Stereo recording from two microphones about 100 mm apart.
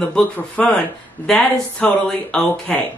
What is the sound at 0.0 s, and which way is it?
A woman's voice, 15° left (ahead or behind).